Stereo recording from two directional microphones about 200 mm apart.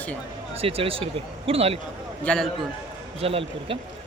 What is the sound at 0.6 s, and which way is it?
Speech, 30° right (ahead or behind).